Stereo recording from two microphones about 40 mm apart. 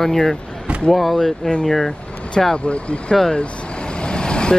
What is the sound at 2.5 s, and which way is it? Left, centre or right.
Speech, left.